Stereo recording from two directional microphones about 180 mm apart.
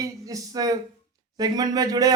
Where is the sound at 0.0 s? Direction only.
20° right (ahead or behind).